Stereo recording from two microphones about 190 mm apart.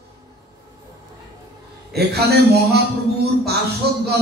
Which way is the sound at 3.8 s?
60° right (ahead or behind).